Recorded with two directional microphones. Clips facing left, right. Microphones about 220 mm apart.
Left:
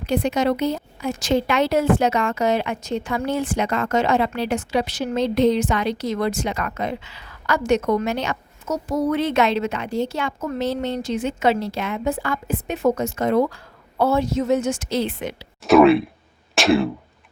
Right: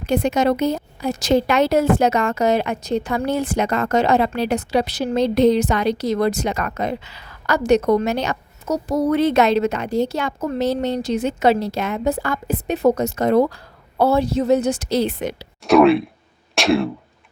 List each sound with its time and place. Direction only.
0.0 s a woman's voice: 45° right (ahead or behind)
15.6 s speech: centre (ahead or behind)